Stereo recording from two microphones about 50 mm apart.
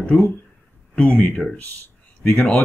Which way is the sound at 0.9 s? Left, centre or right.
Left.